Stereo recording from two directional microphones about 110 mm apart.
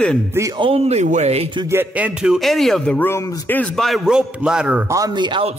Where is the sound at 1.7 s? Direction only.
15° right (ahead or behind); by 3.0 s centre (ahead or behind).